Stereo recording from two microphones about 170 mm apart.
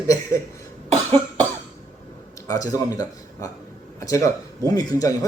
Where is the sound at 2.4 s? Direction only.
20° left (ahead or behind).